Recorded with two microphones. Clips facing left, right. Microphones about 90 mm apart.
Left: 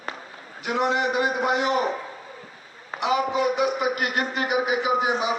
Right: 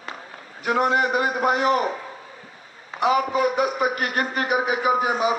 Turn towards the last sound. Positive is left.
turn(degrees=-45)  # may be behind; listen again after turning